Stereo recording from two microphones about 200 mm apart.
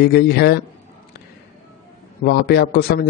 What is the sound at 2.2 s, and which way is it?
Speech, 55° left (ahead or behind).